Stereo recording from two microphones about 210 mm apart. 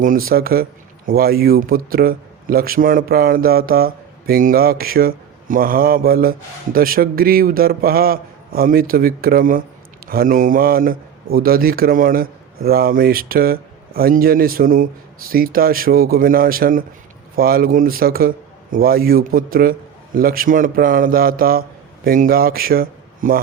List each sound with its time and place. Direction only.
0.3 s speech: 45° right (ahead or behind)